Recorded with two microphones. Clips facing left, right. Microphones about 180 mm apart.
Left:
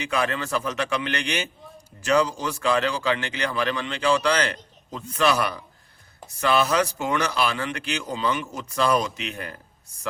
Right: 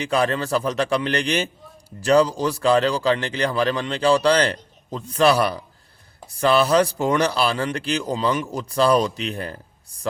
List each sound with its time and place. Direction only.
0.0 s speech: 35° right (ahead or behind)